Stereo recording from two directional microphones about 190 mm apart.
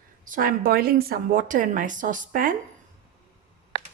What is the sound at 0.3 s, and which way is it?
A woman's voice, 50° right (ahead or behind).